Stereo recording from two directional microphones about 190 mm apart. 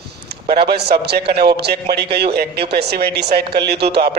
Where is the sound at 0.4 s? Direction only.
55° right (ahead or behind).